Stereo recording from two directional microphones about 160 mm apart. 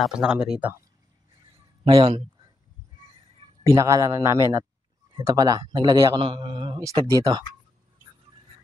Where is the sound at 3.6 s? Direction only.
20° right (ahead or behind).